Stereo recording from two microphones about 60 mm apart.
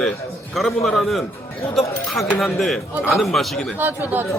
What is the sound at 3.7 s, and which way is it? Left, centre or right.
Speech, right.